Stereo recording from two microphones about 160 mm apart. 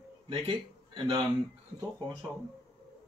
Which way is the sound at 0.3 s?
35° right (ahead or behind).